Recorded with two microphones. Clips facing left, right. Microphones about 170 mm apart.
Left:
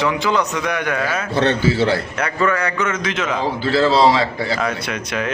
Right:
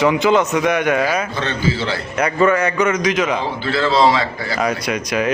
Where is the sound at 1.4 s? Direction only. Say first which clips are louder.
Left 4 dB; 65° left (ahead or behind).